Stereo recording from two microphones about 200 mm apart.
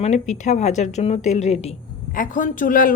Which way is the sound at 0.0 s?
35° left (ahead or behind).